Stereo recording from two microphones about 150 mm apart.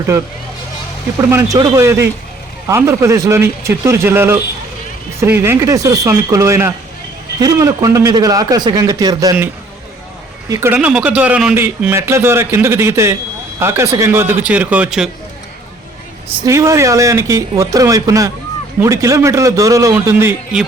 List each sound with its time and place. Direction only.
1.3 s a man's voice: 20° right (ahead or behind)
10.5 s a man's voice: 15° right (ahead or behind)
16.5 s a man's voice: 20° right (ahead or behind)